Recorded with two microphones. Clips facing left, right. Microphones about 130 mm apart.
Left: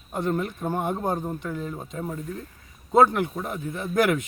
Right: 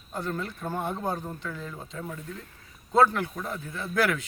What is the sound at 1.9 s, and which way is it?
Speech, 30° left (ahead or behind).